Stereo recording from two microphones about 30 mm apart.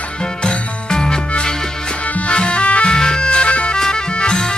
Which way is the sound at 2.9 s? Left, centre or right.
Left.